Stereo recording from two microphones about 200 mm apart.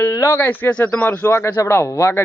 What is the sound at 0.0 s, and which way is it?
Speech, 15° left (ahead or behind).